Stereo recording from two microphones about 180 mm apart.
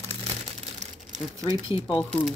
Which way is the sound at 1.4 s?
20° right (ahead or behind).